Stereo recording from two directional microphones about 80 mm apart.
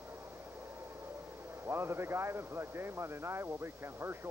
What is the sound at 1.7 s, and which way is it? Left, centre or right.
Speech, right.